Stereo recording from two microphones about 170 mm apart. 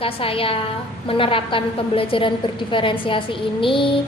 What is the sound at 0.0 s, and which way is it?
A woman's voice, 30° left (ahead or behind).